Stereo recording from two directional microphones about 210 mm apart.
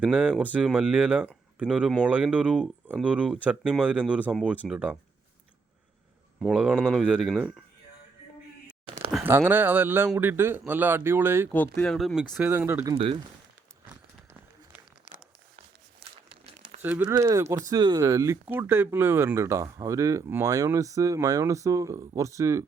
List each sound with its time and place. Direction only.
0.0 s speech: 5° right (ahead or behind)
4.7 s speech: 5° right (ahead or behind)
6.4 s speech: 5° right (ahead or behind)
9.1 s speech: 10° right (ahead or behind)
11.5 s speech: 5° left (ahead or behind); by 13.0 s 15° right (ahead or behind)
16.8 s speech: 5° right (ahead or behind)